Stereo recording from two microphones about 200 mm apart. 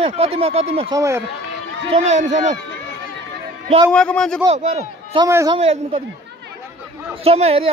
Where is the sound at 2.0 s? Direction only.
35° right (ahead or behind).